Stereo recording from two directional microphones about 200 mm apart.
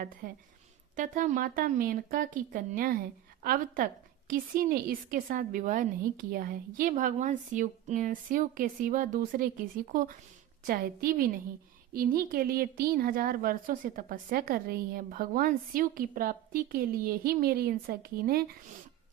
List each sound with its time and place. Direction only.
0.2 s a woman's voice: 40° right (ahead or behind)